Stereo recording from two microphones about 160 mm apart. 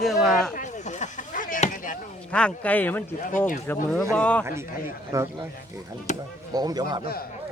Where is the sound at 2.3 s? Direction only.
5° left (ahead or behind).